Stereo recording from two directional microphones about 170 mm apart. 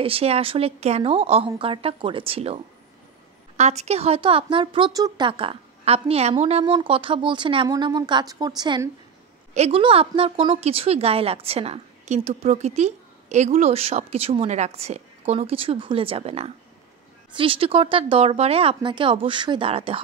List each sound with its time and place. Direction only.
0.0 s a woman's voice: 35° right (ahead or behind)
9.5 s a woman's voice: 35° right (ahead or behind)